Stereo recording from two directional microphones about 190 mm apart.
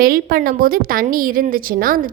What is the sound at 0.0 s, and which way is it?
A woman's voice, 50° right (ahead or behind).